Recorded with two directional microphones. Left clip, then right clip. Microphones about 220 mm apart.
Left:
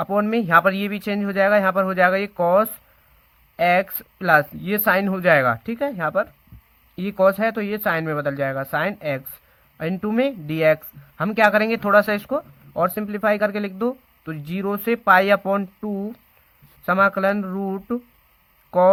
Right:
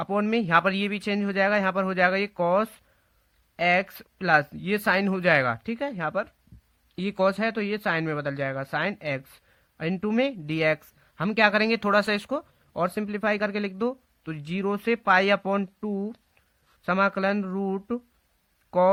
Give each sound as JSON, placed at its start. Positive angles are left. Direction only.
{"t": 0.0, "sound": "speech", "side_deg": -50}